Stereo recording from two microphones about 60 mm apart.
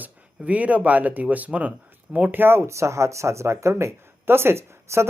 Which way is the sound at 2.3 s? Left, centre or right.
Right.